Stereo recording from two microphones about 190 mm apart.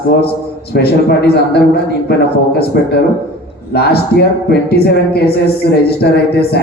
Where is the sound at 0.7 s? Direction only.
55° left (ahead or behind).